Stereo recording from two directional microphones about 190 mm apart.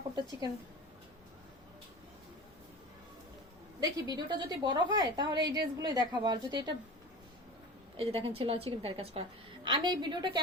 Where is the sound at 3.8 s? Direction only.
20° right (ahead or behind).